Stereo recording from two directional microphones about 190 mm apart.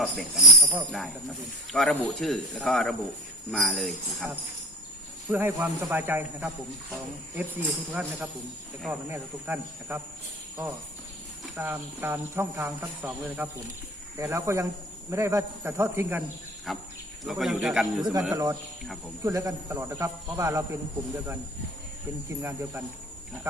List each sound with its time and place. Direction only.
0.0 s speech: centre (ahead or behind)
5.3 s speech: 10° right (ahead or behind)
11.5 s speech: 10° right (ahead or behind)
16.7 s speech: centre (ahead or behind)
18.3 s speech: 15° right (ahead or behind)
22.4 s speech: 15° right (ahead or behind)